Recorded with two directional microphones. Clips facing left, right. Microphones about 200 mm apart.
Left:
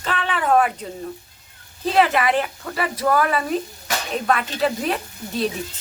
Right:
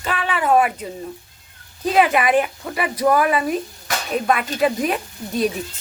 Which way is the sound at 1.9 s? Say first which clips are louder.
Right 2 dB; 15° right (ahead or behind).